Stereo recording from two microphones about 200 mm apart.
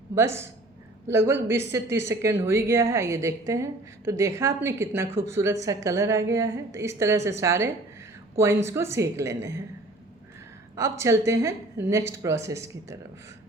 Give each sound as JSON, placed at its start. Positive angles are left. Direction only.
{"t": 0.1, "sound": "speech", "side_deg": -15}
{"t": 10.8, "sound": "speech", "side_deg": -15}